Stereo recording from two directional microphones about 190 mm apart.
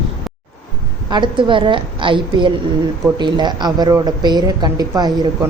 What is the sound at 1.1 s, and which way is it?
Speech, 25° right (ahead or behind).